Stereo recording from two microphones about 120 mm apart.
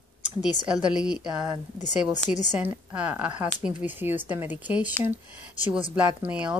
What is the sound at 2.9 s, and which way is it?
Speech, 15° right (ahead or behind).